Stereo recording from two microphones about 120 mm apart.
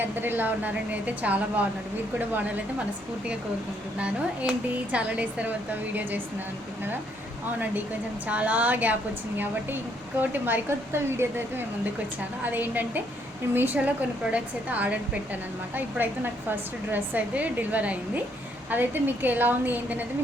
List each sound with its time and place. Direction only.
0.0 s a woman's voice: 15° right (ahead or behind)
3.9 s a woman's voice: 10° right (ahead or behind)
8.3 s a woman's voice: 10° right (ahead or behind)
10.2 s a woman's voice: 15° right (ahead or behind)